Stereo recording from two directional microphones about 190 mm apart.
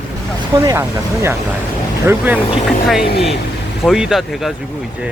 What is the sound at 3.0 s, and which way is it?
Speech, 55° left (ahead or behind).